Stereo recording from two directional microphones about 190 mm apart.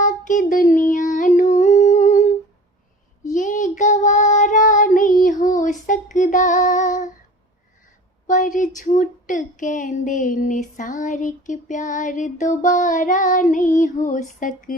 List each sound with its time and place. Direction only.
0.0 s child singing: 40° left (ahead or behind)
3.2 s child singing: 40° left (ahead or behind)
8.3 s speech: 45° left (ahead or behind)